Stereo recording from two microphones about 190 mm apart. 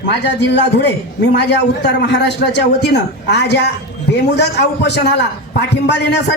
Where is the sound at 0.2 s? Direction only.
60° left (ahead or behind).